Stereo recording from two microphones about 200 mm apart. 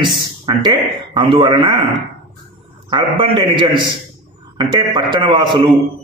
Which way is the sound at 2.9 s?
20° right (ahead or behind).